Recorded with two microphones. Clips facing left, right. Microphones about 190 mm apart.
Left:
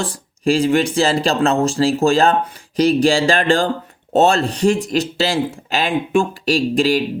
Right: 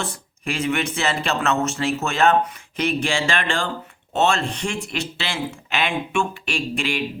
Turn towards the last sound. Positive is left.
turn(degrees=35)  # may be behind; listen again after turning